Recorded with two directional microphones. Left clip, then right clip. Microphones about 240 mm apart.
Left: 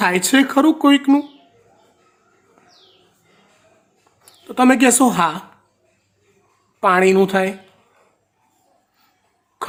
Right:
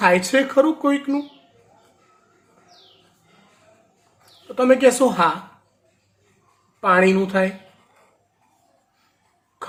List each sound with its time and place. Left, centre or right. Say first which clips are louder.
0.0 s speech: left 1 dB; left
4.5 s speech: left 1 dB; left
6.7 s speech: left 3 dB; left